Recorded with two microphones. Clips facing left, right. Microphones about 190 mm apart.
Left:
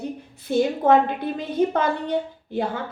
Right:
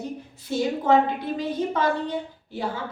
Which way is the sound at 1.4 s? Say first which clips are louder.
Left 5 dB; 55° left (ahead or behind).